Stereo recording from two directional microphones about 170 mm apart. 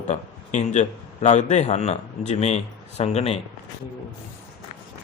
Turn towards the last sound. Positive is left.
turn(degrees=40)  # may be behind; listen again after turning